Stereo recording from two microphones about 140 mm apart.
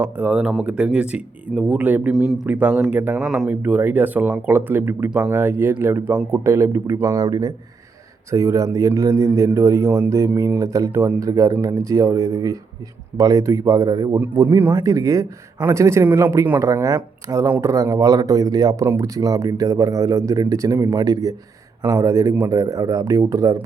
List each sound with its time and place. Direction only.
0.0 s speech: 10° right (ahead or behind)